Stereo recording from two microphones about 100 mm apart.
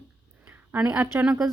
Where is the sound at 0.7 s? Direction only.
15° right (ahead or behind).